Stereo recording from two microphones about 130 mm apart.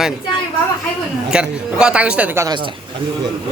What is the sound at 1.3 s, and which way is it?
Speech, 5° right (ahead or behind).